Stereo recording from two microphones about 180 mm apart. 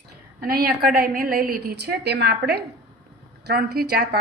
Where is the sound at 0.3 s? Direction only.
55° right (ahead or behind).